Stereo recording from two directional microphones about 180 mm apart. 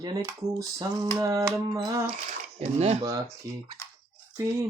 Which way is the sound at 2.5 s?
35° right (ahead or behind).